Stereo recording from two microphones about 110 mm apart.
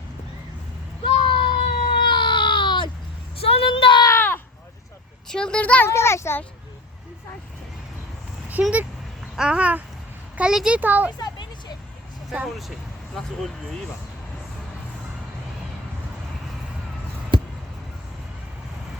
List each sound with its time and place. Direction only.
1.0 s baby cry: 50° left (ahead or behind)
3.3 s vehicle: 60° left (ahead or behind)
5.3 s speech: 5° left (ahead or behind)
5.9 s a child's voice: 25° left (ahead or behind)
8.6 s a sound: 15° right (ahead or behind)
10.3 s a child's voice: 5° right (ahead or behind)
10.8 s a sound: 15° right (ahead or behind)
12.3 s speech: 5° right (ahead or behind)
17.3 s a sound: 45° right (ahead or behind)